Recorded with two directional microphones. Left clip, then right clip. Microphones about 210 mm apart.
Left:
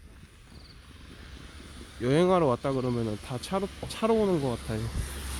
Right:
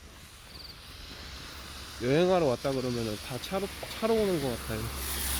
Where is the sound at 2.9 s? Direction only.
10° right (ahead or behind).